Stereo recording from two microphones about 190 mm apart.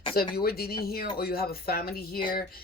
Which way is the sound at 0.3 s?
55° left (ahead or behind).